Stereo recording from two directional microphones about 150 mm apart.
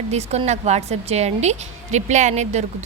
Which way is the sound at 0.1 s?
45° right (ahead or behind).